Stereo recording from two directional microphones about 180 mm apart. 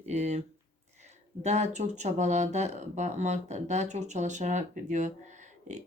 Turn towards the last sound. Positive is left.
turn(degrees=-45)  # may be behind; listen again after turning